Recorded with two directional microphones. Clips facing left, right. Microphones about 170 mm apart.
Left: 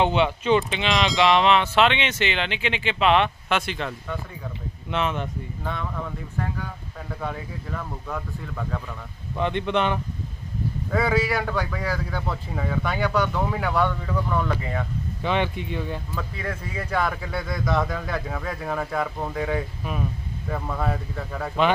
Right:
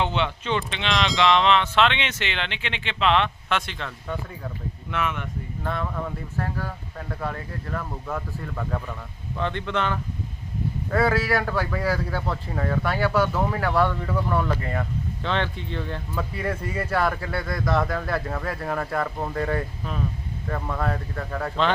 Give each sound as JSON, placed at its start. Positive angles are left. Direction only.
{"t": 0.0, "sound": "speech", "side_deg": 15}
{"t": 4.9, "sound": "speech", "side_deg": 25}
{"t": 5.6, "sound": "speech", "side_deg": 0}
{"t": 9.4, "sound": "speech", "side_deg": 20}
{"t": 10.9, "sound": "speech", "side_deg": 0}
{"t": 15.2, "sound": "speech", "side_deg": 15}
{"t": 16.1, "sound": "speech", "side_deg": -10}